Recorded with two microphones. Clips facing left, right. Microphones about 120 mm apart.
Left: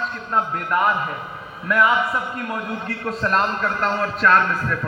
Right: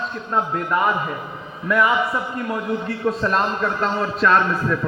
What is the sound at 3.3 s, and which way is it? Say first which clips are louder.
A man's voice: even; 5° right (ahead or behind).